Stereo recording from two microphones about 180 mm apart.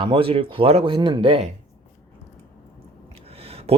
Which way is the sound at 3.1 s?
35° right (ahead or behind).